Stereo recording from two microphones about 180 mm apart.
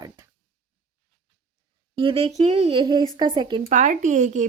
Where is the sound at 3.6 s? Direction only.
45° right (ahead or behind).